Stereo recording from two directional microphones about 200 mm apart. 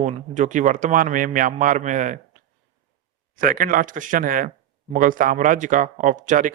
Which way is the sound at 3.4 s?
45° right (ahead or behind).